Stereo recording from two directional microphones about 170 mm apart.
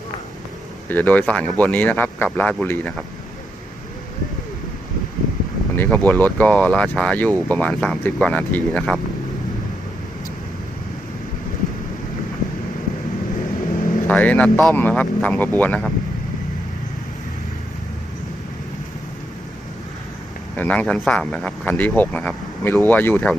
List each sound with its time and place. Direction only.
0.9 s speech: 10° left (ahead or behind)
5.7 s speech: 10° left (ahead or behind)
13.8 s vehicle: 55° left (ahead or behind)
14.1 s speech: 10° left (ahead or behind)
20.6 s speech: 5° left (ahead or behind)